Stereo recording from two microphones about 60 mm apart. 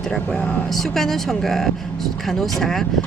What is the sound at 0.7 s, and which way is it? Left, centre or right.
Speech, centre.